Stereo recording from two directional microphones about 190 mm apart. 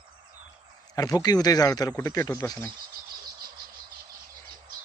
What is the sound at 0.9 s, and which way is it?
Speech, 20° left (ahead or behind).